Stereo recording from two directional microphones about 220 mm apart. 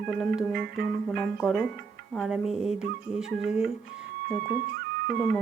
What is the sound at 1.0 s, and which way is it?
Speech, centre (ahead or behind).